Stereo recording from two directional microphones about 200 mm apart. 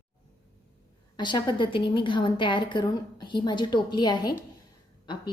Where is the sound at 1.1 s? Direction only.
25° left (ahead or behind).